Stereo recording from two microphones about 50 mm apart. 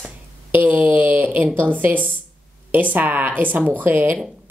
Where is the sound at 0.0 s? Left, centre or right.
Right.